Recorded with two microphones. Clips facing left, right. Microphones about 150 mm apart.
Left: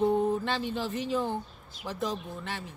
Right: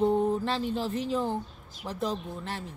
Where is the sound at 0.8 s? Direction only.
35° right (ahead or behind).